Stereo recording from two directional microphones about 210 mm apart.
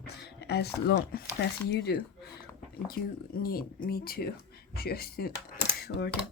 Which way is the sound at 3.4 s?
45° left (ahead or behind).